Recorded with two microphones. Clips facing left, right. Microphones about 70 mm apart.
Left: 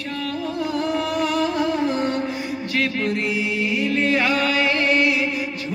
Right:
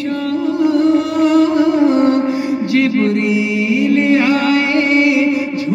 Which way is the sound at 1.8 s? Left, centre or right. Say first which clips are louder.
Right 10 dB; centre.